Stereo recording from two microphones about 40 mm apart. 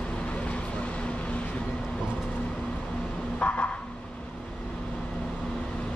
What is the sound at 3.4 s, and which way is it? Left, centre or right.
Vehicle, left.